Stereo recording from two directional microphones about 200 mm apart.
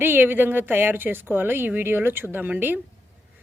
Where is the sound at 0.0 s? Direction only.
10° right (ahead or behind).